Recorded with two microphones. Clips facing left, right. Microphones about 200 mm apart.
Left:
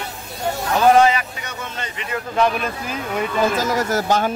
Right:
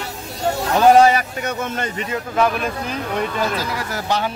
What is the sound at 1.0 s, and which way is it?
A man's voice, 45° right (ahead or behind).